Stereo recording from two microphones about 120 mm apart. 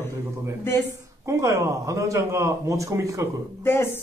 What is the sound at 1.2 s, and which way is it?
Speech, 25° right (ahead or behind).